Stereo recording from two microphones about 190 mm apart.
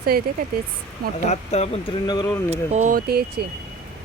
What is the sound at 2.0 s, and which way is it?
Speech, 20° left (ahead or behind).